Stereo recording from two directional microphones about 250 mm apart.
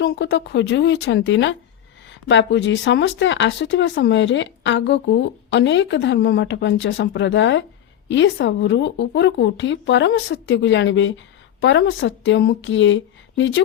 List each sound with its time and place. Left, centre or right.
0.0 s speech: left